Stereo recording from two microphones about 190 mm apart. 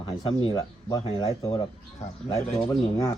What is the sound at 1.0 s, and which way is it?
Speech, 30° left (ahead or behind).